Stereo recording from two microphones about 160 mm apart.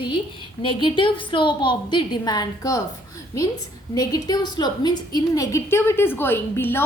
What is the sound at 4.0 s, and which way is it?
A woman's voice, 25° left (ahead or behind).